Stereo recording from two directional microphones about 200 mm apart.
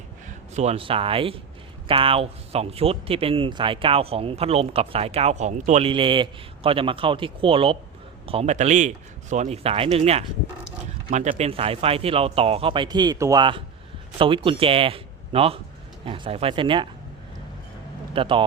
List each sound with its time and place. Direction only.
0.3 s speech: 35° right (ahead or behind)
18.1 s speech: 25° right (ahead or behind)